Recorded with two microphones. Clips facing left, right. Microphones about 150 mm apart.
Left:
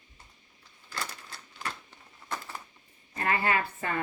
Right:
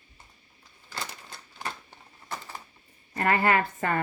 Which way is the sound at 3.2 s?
45° right (ahead or behind).